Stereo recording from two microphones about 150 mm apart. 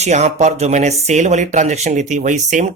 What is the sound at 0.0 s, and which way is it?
Speech, 50° right (ahead or behind).